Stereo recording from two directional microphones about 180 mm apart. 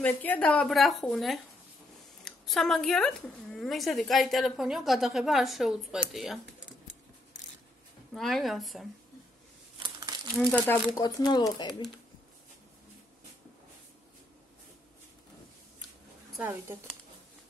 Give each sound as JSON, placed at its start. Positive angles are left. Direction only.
{"t": 0.0, "sound": "a woman's voice", "side_deg": 10}
{"t": 8.1, "sound": "a woman's voice", "side_deg": 0}
{"t": 9.8, "sound": "crumpling", "side_deg": -25}
{"t": 10.3, "sound": "speech", "side_deg": 5}
{"t": 11.0, "sound": "speech", "side_deg": 20}
{"t": 16.3, "sound": "speech", "side_deg": -10}